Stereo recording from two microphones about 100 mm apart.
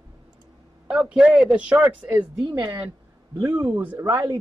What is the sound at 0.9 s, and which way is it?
A woman's voice, 10° right (ahead or behind).